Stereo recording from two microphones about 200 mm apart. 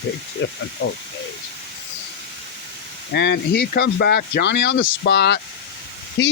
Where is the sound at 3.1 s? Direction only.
60° left (ahead or behind).